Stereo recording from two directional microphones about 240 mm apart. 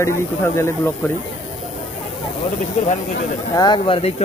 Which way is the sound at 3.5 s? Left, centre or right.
Centre.